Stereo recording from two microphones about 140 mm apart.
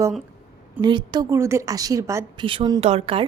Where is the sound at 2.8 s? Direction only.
50° right (ahead or behind).